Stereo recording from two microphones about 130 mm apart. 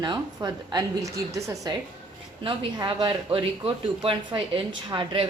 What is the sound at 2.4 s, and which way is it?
Speech, 40° right (ahead or behind).